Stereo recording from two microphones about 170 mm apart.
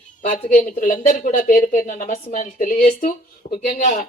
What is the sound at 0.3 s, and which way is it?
Speech, 50° left (ahead or behind).